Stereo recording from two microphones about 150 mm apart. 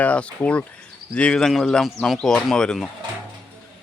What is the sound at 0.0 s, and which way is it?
Speech, 10° left (ahead or behind).